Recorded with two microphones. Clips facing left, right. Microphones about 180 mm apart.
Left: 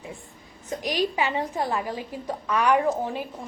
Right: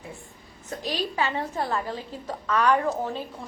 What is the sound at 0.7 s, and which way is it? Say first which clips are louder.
A woman's voice: left 4 dB; 15° left (ahead or behind).